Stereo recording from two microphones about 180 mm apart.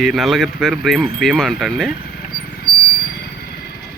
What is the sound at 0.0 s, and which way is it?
Speech, centre (ahead or behind).